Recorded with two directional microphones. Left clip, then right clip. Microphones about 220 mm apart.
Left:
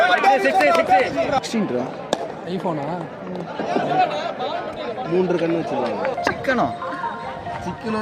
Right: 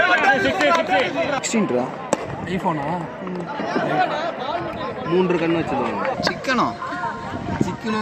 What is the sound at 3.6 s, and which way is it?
Speech, 50° left (ahead or behind).